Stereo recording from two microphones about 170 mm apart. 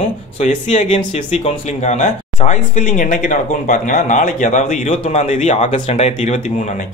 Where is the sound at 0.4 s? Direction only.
40° left (ahead or behind).